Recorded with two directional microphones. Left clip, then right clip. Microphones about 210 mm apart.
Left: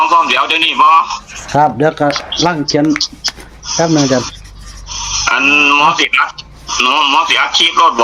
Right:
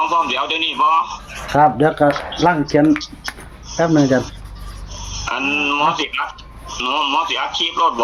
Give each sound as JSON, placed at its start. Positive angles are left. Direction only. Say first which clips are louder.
{"t": 0.0, "sound": "speech", "louder": "left 7 dB", "side_deg": 15}
{"t": 1.5, "sound": "speech", "louder": "left 2 dB", "side_deg": 30}
{"t": 3.8, "sound": "speech", "louder": "left 2 dB", "side_deg": 15}
{"t": 4.9, "sound": "a sound", "louder": "left 13 dB", "side_deg": 15}
{"t": 5.3, "sound": "speech", "louder": "left 9 dB", "side_deg": 15}